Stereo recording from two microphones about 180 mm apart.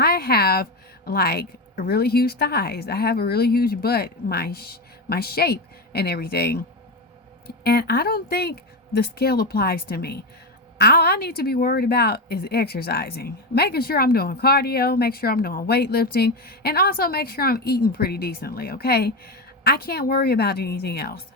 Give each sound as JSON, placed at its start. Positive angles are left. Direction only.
{"t": 0.0, "sound": "a woman's voice", "side_deg": 60}